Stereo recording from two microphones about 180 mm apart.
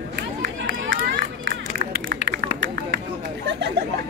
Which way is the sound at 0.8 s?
90° right.